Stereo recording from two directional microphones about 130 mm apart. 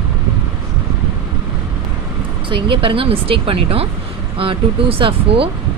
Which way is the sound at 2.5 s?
40° right (ahead or behind).